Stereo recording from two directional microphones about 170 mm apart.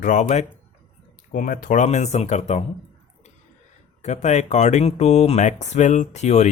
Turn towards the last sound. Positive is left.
turn(degrees=40)  # may be behind; listen again after turning